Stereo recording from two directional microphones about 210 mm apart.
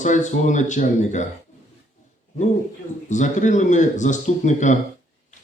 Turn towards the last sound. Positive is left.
turn(degrees=35)  # may be behind; listen again after turning